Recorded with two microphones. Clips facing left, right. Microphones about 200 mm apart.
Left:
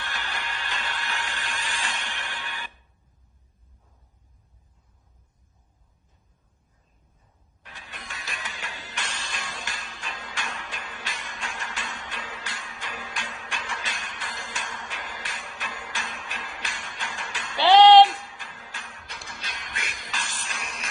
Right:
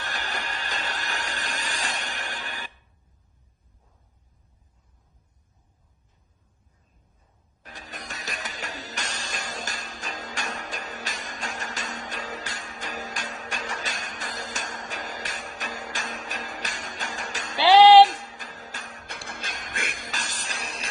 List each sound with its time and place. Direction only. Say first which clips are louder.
0.0 s a sound: right 2 dB; 40° right (ahead or behind)
7.6 s music: right 4 dB; 40° right (ahead or behind)
17.7 s music: even; 10° right (ahead or behind)
18.0 s music: right 1 dB; 40° right (ahead or behind)